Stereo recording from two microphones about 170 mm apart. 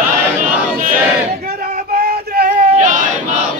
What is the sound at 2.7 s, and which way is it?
Battle cry, 50° right (ahead or behind).